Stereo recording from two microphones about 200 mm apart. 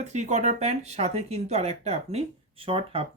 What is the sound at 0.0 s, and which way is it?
Speech, 35° right (ahead or behind).